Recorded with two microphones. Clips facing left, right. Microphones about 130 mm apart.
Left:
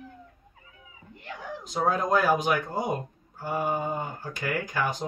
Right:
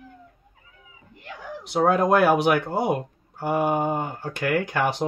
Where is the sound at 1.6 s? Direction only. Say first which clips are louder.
Right 7 dB; 75° right (ahead or behind).